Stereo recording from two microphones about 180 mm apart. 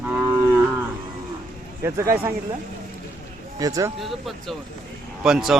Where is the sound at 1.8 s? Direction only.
15° right (ahead or behind).